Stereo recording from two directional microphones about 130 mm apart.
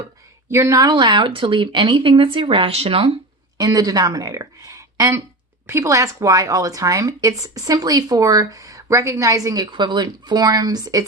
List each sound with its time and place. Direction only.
0.5 s speech: 25° right (ahead or behind); by 3.1 s 45° right (ahead or behind)
3.6 s speech: 30° right (ahead or behind)